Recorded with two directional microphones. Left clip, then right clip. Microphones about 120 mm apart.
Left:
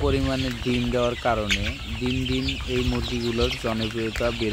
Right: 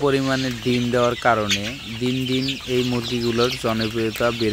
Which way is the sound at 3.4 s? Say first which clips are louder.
Right 4 dB; 25° right (ahead or behind).